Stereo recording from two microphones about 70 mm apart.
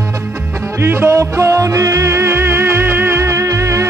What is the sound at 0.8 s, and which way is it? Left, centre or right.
Music, right.